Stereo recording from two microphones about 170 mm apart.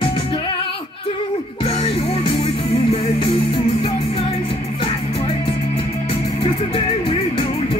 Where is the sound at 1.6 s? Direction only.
35° left (ahead or behind).